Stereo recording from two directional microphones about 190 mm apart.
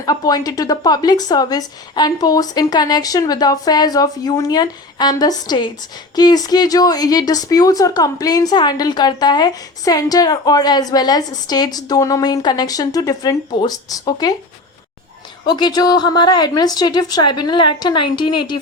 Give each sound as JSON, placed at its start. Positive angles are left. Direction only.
{"t": 0.0, "sound": "speech", "side_deg": 20}
{"t": 15.4, "sound": "speech", "side_deg": 20}